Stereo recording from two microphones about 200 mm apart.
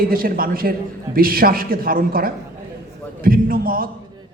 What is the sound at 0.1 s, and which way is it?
A man's voice, 45° right (ahead or behind).